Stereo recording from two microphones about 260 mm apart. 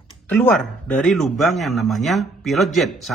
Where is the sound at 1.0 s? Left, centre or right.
Centre.